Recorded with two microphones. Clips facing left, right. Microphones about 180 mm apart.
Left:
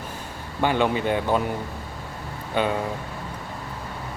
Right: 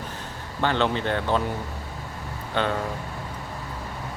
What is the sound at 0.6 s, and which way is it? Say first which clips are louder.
Speech: left 2 dB; 10° left (ahead or behind).